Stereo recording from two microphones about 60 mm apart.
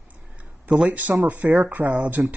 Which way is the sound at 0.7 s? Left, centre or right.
Right.